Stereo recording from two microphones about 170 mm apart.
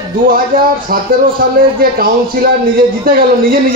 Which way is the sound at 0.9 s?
60° right (ahead or behind).